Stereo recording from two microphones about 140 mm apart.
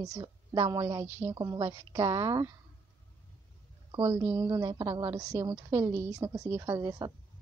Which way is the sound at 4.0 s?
15° right (ahead or behind).